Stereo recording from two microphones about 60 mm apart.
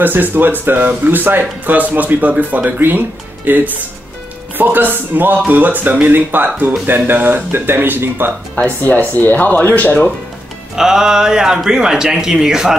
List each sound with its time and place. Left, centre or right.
0.0 s a man's voice: right
8.5 s speech: left
10.8 s speech: centre